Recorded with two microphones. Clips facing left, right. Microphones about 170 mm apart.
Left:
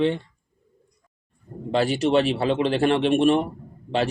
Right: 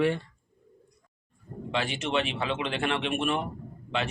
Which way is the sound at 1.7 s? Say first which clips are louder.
Left 9 dB; 35° left (ahead or behind).